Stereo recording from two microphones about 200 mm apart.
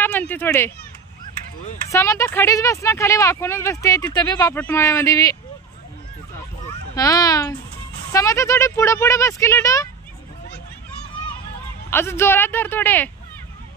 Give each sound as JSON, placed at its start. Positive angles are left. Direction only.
{"t": 0.3, "sound": "speech", "side_deg": 10}
{"t": 1.9, "sound": "speech", "side_deg": 15}
{"t": 7.0, "sound": "speech", "side_deg": 15}
{"t": 11.9, "sound": "speech", "side_deg": 10}